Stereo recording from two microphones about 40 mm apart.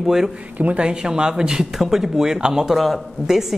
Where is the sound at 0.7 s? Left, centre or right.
Right.